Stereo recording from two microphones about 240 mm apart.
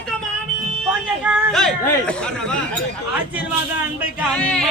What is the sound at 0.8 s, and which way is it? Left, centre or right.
Chatter, centre.